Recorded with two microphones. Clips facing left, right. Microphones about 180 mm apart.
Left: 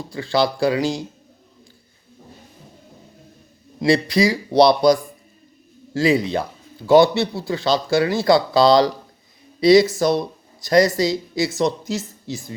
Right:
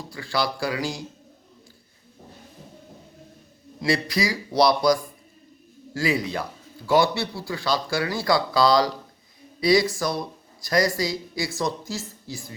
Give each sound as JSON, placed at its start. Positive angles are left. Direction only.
{"t": 0.1, "sound": "speech", "side_deg": 25}
{"t": 3.8, "sound": "speech", "side_deg": 25}